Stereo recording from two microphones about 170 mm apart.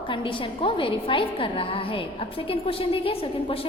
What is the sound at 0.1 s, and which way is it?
A woman's voice, 30° left (ahead or behind).